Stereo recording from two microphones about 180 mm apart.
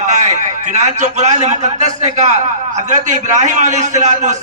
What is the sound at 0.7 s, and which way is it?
A man's voice, 40° right (ahead or behind).